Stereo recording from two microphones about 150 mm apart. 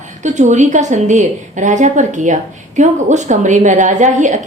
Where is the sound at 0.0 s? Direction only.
55° right (ahead or behind).